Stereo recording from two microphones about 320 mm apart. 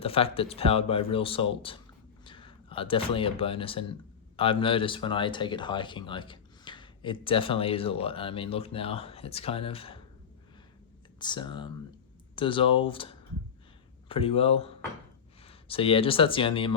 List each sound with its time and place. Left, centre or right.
0.0 s speech: centre
11.2 s speech: centre